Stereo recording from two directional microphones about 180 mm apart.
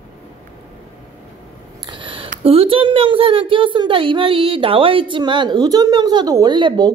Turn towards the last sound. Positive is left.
turn(degrees=-25)  # may be behind; listen again after turning